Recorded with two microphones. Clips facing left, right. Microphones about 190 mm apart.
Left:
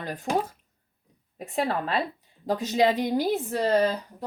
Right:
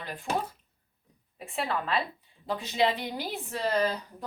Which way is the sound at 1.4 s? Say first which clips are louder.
Left 5 dB; 40° left (ahead or behind).